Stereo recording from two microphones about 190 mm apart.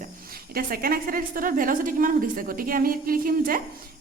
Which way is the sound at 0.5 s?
50° right (ahead or behind).